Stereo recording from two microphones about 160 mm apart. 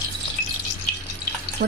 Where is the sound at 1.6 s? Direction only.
70° right (ahead or behind).